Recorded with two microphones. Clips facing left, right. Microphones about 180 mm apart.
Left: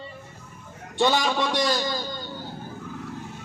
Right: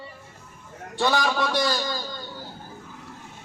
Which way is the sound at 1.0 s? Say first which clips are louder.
Left 1 dB; 20° left (ahead or behind).